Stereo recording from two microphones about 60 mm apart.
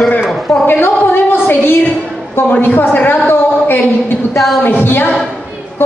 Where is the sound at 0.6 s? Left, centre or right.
Left.